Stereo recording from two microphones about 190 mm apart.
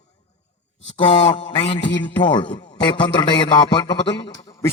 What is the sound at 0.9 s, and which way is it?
A man's voice, 30° left (ahead or behind).